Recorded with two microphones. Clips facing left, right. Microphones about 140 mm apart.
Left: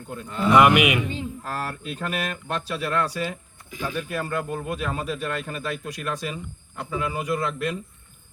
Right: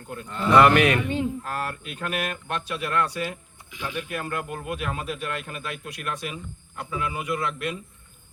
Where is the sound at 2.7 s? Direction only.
35° left (ahead or behind).